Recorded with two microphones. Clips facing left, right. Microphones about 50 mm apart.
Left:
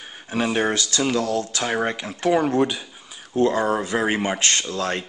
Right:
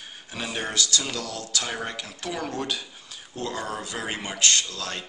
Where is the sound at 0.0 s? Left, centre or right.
Left.